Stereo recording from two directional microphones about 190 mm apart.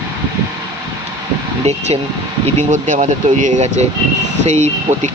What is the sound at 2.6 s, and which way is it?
Speech, 40° right (ahead or behind).